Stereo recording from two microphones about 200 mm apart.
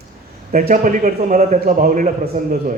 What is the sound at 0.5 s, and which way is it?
A man's voice, 45° right (ahead or behind).